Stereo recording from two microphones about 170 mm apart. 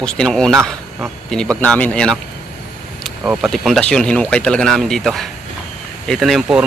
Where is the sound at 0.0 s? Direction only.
5° left (ahead or behind).